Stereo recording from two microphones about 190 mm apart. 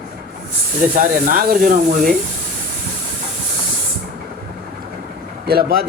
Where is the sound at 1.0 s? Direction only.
45° right (ahead or behind).